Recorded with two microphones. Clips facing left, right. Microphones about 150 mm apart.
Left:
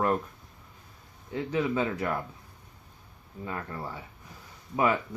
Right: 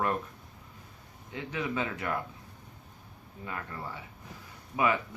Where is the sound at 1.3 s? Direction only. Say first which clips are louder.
Left 6 dB; 35° left (ahead or behind).